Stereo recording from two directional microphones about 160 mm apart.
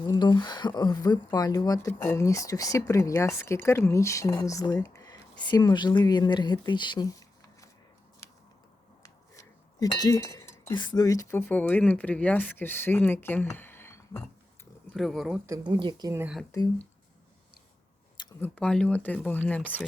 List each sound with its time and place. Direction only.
0.0 s speech: 25° left (ahead or behind)
9.0 s chink: 20° left (ahead or behind)
10.8 s speech: 25° left (ahead or behind)
14.9 s speech: centre (ahead or behind)
15.4 s speech: 25° right (ahead or behind)
16.1 s speech: 10° right (ahead or behind)
18.3 s speech: 10° left (ahead or behind)